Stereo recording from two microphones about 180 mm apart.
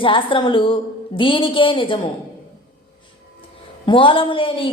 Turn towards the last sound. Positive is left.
turn(degrees=30)  # may be behind; listen again after turning